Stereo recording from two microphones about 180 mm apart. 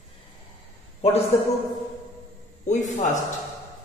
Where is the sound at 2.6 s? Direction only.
40° left (ahead or behind).